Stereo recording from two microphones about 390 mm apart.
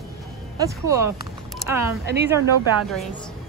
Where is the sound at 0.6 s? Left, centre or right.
Centre.